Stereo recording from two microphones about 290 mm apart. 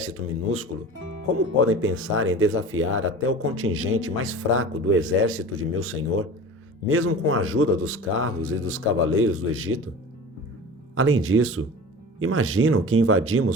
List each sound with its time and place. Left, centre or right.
0.0 s speech: right
10.9 s speech: right